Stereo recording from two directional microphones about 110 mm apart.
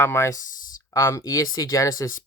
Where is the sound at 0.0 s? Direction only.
25° left (ahead or behind).